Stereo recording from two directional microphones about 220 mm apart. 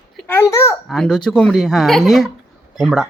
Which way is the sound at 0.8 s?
Centre (ahead or behind).